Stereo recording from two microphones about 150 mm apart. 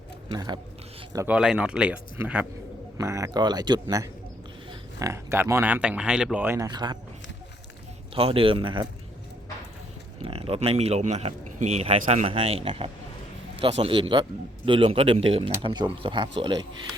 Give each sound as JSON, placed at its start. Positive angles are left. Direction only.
{"t": 0.3, "sound": "speech", "side_deg": -30}
{"t": 1.3, "sound": "speech", "side_deg": -5}
{"t": 6.7, "sound": "speech", "side_deg": -30}
{"t": 8.1, "sound": "a man's voice", "side_deg": -40}
{"t": 10.2, "sound": "a man's voice", "side_deg": -40}